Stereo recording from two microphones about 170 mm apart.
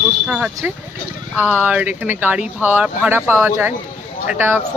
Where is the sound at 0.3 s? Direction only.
5° right (ahead or behind).